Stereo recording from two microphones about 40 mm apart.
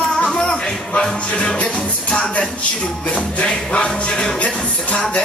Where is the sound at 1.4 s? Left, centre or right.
Left.